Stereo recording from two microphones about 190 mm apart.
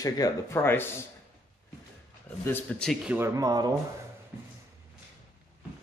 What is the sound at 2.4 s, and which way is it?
Speech, 10° left (ahead or behind).